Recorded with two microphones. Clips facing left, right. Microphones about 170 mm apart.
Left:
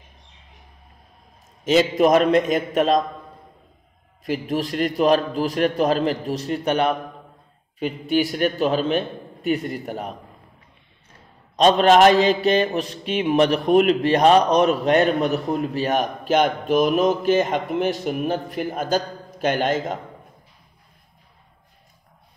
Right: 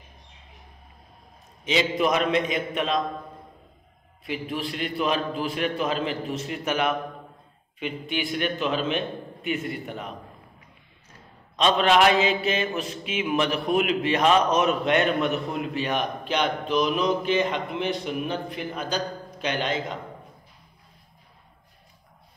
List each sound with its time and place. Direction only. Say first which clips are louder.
1.6 s a man's voice: left 7 dB; 45° left (ahead or behind)
4.2 s a man's voice: left 6 dB; 40° left (ahead or behind)
11.5 s a man's voice: left 6 dB; 40° left (ahead or behind)